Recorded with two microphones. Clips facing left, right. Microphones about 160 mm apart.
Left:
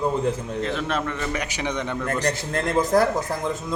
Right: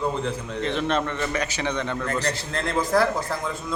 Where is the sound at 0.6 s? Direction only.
5° left (ahead or behind).